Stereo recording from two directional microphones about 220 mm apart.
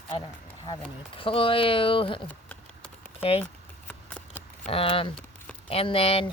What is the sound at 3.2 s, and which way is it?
Speech, 25° left (ahead or behind).